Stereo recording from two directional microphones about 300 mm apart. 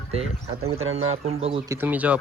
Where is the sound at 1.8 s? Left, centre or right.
Centre.